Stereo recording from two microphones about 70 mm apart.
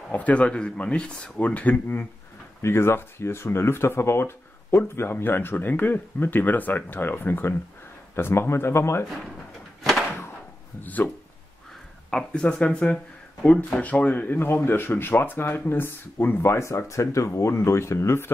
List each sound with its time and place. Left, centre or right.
0.1 s speech: centre
2.6 s speech: left
10.8 s speech: left
12.1 s speech: centre; by 18.3 s left